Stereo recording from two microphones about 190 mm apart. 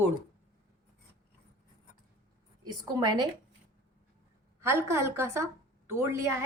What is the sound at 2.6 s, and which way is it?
Speech, 20° right (ahead or behind).